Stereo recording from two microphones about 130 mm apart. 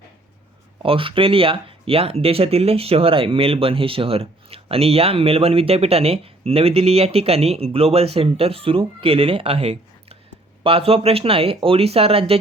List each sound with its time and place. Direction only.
0.8 s speech: 40° right (ahead or behind)